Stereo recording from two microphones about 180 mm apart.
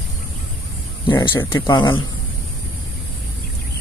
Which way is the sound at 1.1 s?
25° left (ahead or behind).